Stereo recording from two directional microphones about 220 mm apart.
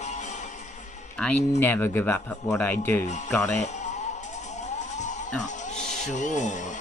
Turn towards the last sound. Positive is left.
turn(degrees=35)  # may be behind; listen again after turning